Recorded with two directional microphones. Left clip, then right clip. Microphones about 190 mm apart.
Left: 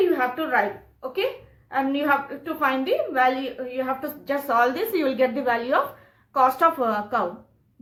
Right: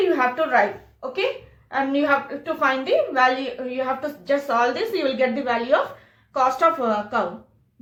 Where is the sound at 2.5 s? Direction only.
20° left (ahead or behind).